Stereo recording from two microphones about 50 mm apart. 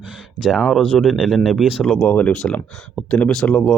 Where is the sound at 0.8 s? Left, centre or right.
Centre.